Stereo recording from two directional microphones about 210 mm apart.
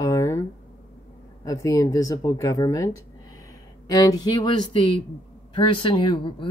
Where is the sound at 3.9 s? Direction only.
15° left (ahead or behind).